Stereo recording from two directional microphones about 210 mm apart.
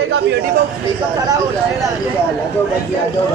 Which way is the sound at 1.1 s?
20° right (ahead or behind).